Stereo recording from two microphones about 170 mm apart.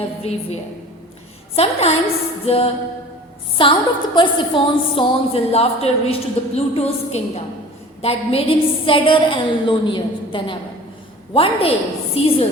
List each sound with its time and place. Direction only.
0.2 s a woman's voice: 40° left (ahead or behind)